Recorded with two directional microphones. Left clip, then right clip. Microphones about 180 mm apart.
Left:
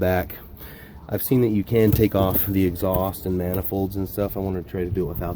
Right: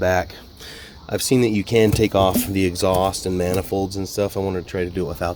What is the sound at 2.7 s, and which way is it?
Speech, 15° right (ahead or behind).